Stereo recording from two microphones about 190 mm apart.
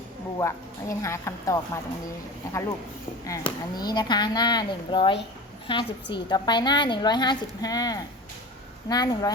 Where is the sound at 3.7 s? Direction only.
20° left (ahead or behind).